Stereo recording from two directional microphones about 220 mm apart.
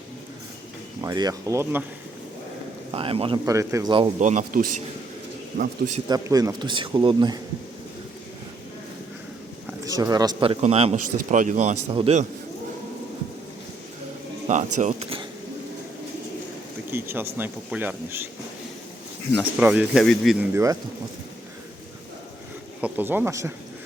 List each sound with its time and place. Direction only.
1.0 s speech: 15° right (ahead or behind)
2.9 s speech: 25° right (ahead or behind)
4.2 s speech: 35° right (ahead or behind)
6.1 s speech: 15° right (ahead or behind)
9.8 s speech: 15° right (ahead or behind)
14.4 s a sound: 35° right (ahead or behind)
14.8 s speech: 30° right (ahead or behind)
16.9 s speech: 10° right (ahead or behind)
19.4 s speech: 5° right (ahead or behind)
20.5 s speech: 15° right (ahead or behind)
22.8 s speech: 10° right (ahead or behind)